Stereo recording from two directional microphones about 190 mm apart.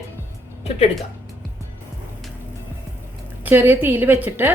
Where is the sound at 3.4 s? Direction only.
10° right (ahead or behind).